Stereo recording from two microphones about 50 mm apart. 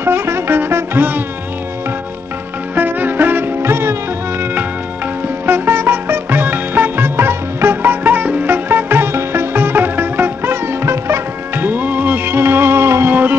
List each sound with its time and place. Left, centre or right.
0.0 s music: right
2.7 s music: right
5.5 s music: right
8.6 s music: right
11.6 s music: right
13.1 s music: right